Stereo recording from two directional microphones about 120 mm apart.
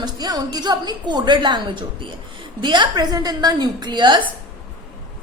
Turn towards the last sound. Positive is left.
turn(degrees=-40)  # may be behind; listen again after turning